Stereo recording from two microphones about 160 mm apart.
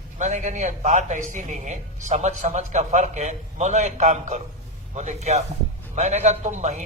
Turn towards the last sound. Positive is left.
turn(degrees=-45)  # may be behind; listen again after turning